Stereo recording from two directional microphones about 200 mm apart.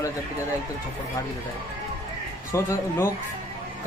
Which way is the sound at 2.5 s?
15° left (ahead or behind).